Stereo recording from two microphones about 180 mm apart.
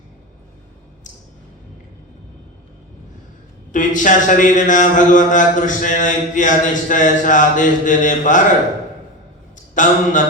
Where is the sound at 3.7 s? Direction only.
45° left (ahead or behind).